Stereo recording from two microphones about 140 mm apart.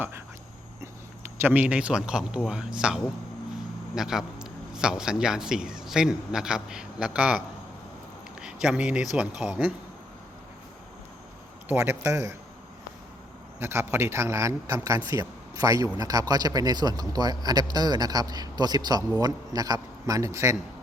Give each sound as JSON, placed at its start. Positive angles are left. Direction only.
{"t": 1.4, "sound": "a man's voice", "side_deg": -15}
{"t": 11.7, "sound": "a man's voice", "side_deg": -15}
{"t": 13.6, "sound": "a man's voice", "side_deg": -15}